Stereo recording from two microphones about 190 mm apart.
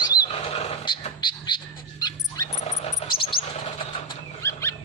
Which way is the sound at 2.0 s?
20° left (ahead or behind).